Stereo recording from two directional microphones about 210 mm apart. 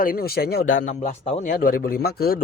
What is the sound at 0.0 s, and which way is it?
Speech, 45° left (ahead or behind).